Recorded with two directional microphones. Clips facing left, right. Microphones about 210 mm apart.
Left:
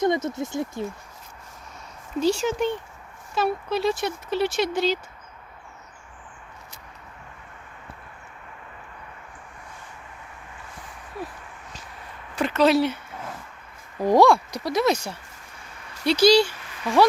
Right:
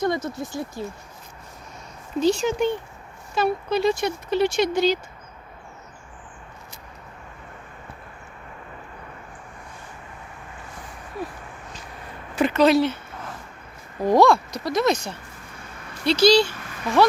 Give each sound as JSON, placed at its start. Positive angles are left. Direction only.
{"t": 0.0, "sound": "speech", "side_deg": 20}
{"t": 2.2, "sound": "speech", "side_deg": 5}
{"t": 12.4, "sound": "speech", "side_deg": 0}
{"t": 14.0, "sound": "speech", "side_deg": 10}